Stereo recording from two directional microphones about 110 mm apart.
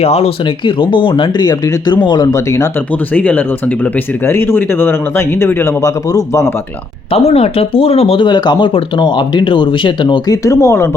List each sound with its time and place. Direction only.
0.0 s speech: 70° left (ahead or behind)
0.4 s speech: 50° left (ahead or behind); by 2.6 s 30° left (ahead or behind)
3.1 s speech: 15° left (ahead or behind)
7.1 s speech: 65° left (ahead or behind); by 10.8 s 30° left (ahead or behind)